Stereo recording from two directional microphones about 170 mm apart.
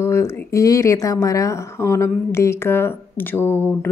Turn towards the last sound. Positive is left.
turn(degrees=15)  # may be behind; listen again after turning